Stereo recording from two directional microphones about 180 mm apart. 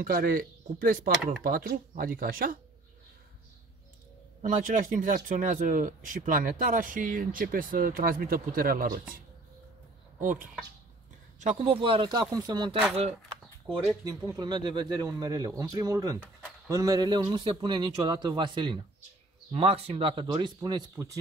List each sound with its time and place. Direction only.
0.0 s speech: 50° right (ahead or behind)
4.4 s speech: 45° right (ahead or behind)
10.2 s speech: 50° right (ahead or behind)
11.4 s speech: 35° right (ahead or behind)
14.0 s speech: 20° right (ahead or behind)